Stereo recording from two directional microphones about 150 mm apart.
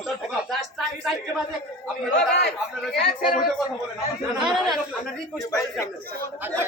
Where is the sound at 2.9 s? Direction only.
90° left.